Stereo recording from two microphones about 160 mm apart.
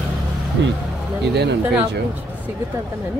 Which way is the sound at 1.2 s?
90° right.